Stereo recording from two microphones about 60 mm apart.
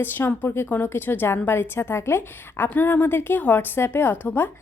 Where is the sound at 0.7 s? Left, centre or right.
Left.